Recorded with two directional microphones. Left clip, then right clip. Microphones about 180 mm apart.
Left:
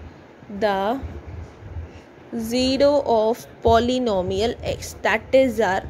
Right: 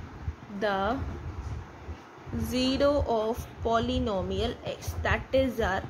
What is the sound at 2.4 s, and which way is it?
A woman's voice, 30° left (ahead or behind).